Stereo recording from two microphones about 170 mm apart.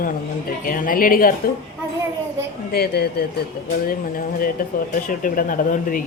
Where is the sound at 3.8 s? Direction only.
60° left (ahead or behind).